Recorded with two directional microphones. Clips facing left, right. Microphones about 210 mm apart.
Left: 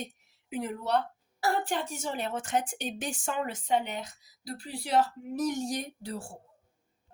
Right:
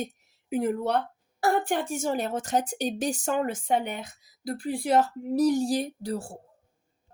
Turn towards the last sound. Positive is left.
turn(degrees=-40)  # may be behind; listen again after turning